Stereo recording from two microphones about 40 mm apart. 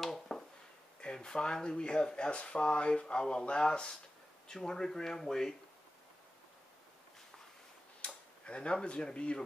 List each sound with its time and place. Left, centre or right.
0.0 s a sound: centre
1.0 s speech: centre
8.0 s tick-tock: left
8.8 s speech: left